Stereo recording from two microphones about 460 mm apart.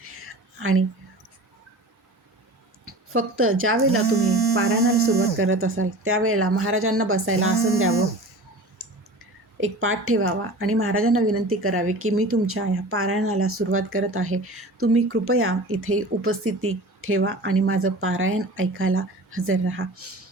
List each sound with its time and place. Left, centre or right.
0.0 s whispering: right
2.8 s speech: right
8.8 s clicking: right
9.6 s speech: right